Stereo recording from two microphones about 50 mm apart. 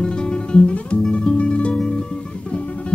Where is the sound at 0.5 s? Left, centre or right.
Left.